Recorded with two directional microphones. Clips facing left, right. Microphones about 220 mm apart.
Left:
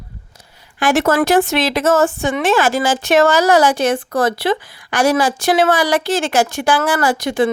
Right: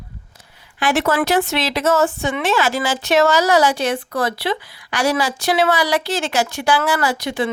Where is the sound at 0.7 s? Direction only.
45° left (ahead or behind).